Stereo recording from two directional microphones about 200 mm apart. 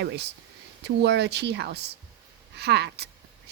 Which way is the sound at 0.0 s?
55° right (ahead or behind).